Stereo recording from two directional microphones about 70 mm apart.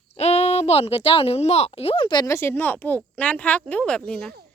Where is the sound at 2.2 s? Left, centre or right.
Left; by 4.3 s centre.